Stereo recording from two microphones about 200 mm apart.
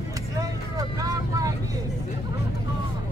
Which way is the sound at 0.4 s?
15° right (ahead or behind).